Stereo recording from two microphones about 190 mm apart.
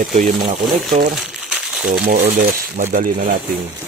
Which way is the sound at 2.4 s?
45° right (ahead or behind).